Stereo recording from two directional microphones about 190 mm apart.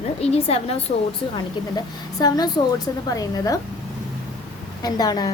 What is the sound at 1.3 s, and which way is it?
A woman's voice, 20° left (ahead or behind).